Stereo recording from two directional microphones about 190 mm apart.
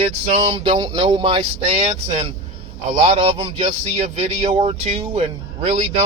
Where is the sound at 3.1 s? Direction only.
30° right (ahead or behind).